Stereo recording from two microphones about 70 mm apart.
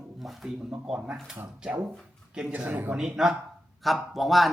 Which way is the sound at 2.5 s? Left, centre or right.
Right.